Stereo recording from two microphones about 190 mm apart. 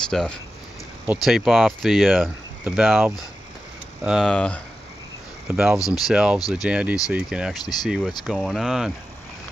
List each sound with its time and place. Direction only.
0.1 s speech: centre (ahead or behind)
5.8 s speech: 20° left (ahead or behind)
6.0 s speech: 5° right (ahead or behind)